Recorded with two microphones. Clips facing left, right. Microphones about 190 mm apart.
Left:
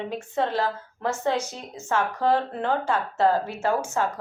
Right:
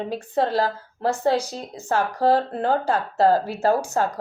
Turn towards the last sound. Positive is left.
turn(degrees=-35)  # may be behind; listen again after turning